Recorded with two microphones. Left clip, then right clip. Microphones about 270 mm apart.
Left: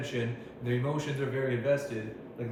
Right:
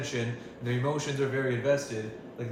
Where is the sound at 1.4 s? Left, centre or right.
Centre.